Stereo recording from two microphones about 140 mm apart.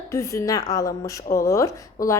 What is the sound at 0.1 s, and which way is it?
A woman's voice, 20° left (ahead or behind).